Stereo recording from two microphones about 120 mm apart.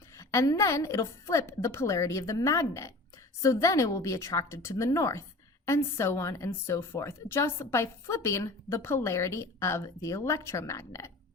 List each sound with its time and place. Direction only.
0.2 s a woman's voice: 25° left (ahead or behind)